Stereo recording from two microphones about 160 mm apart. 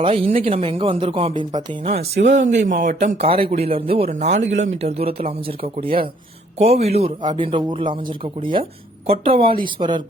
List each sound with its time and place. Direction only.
0.0 s speech: 35° right (ahead or behind)